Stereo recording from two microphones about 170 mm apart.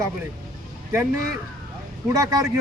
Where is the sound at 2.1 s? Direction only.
20° right (ahead or behind).